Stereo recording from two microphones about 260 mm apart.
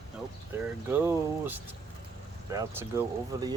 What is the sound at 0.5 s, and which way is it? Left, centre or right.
Speech, centre.